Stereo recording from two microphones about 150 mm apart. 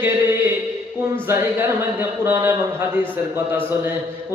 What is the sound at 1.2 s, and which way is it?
Mantra, 15° right (ahead or behind).